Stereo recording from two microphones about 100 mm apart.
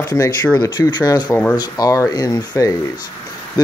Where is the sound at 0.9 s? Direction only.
45° left (ahead or behind).